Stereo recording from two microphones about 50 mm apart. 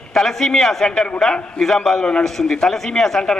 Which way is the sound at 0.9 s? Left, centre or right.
Centre.